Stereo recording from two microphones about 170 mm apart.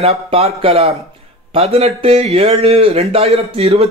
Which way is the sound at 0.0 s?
35° right (ahead or behind).